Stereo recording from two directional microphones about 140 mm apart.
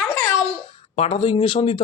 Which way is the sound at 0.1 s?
25° left (ahead or behind).